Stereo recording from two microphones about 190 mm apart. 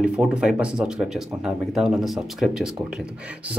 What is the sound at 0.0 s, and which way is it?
Speech, 5° right (ahead or behind).